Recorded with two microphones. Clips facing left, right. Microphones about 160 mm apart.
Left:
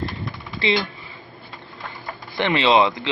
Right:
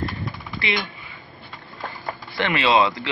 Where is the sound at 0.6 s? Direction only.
25° left (ahead or behind).